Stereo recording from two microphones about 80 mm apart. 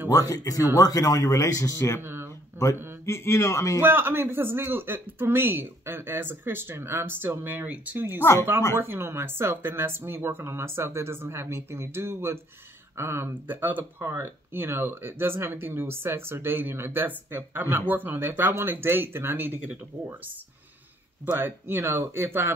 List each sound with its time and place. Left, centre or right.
0.1 s speech: left
2.0 s a sound: right
3.1 s a man's voice: left
3.8 s speech: right
21.4 s speech: right